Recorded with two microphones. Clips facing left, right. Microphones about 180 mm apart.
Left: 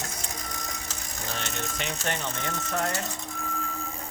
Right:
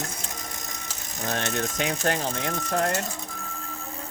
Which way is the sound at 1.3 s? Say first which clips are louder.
Right 7 dB; 55° right (ahead or behind).